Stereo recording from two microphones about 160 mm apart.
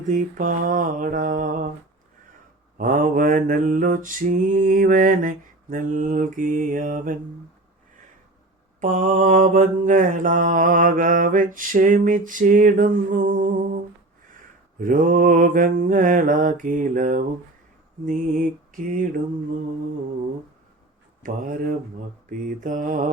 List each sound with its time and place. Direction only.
0.1 s mantra: 55° right (ahead or behind)
2.7 s mantra: 60° right (ahead or behind)
8.8 s mantra: 50° right (ahead or behind)
14.8 s mantra: 55° right (ahead or behind)
21.2 s mantra: 60° right (ahead or behind)